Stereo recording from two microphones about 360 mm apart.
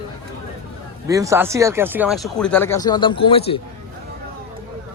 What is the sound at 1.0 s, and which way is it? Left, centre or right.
A man's voice, centre.